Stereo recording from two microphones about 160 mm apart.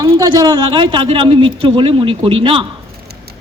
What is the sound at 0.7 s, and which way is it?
A man's voice, 30° right (ahead or behind).